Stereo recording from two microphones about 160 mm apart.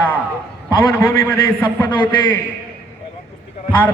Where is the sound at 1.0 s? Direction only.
20° left (ahead or behind).